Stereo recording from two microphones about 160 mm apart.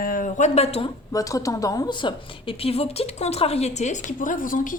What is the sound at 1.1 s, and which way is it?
A woman's voice, 20° left (ahead or behind).